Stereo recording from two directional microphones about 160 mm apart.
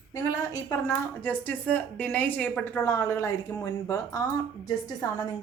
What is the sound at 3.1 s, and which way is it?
A woman's voice, 20° left (ahead or behind).